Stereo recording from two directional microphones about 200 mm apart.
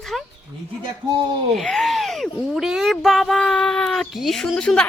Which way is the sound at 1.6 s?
Centre (ahead or behind).